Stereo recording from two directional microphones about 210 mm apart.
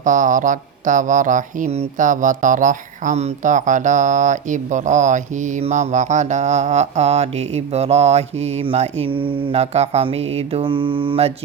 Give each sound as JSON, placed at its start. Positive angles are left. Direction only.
{"t": 0.0, "sound": "speech", "side_deg": -40}